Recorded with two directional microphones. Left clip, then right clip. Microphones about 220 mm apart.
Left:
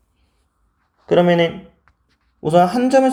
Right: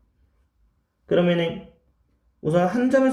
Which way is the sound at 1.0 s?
15° left (ahead or behind).